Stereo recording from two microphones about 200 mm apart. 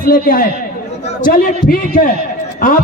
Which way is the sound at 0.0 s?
45° left (ahead or behind).